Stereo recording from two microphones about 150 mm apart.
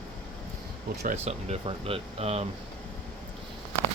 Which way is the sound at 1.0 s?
50° right (ahead or behind).